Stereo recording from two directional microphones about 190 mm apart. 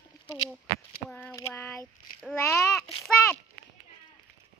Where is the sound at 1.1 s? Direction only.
10° left (ahead or behind).